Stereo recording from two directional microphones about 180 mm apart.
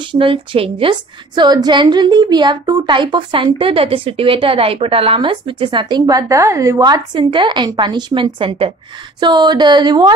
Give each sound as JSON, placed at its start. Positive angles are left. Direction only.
{"t": 0.1, "sound": "a woman's voice", "side_deg": -30}